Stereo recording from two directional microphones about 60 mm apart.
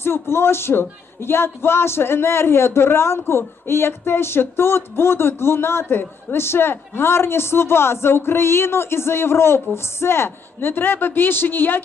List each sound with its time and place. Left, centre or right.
0.0 s a man's voice: left